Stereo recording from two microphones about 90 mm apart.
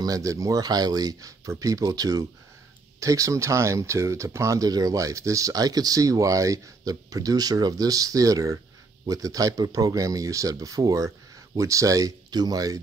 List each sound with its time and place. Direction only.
0.0 s speech: 40° right (ahead or behind)